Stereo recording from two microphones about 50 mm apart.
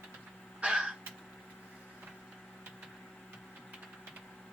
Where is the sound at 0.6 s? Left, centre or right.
Centre.